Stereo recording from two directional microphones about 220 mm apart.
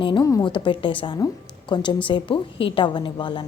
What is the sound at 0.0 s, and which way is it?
A woman's voice, 20° left (ahead or behind).